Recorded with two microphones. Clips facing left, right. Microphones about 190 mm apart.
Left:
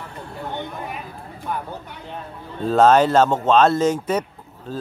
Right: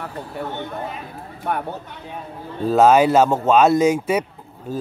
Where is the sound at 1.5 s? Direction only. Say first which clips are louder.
Right 4 dB; 65° right (ahead or behind).